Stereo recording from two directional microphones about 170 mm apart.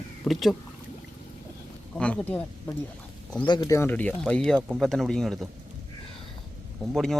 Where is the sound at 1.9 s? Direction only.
5° left (ahead or behind).